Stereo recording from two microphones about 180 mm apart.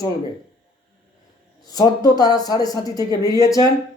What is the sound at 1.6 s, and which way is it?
A woman's voice, 20° left (ahead or behind).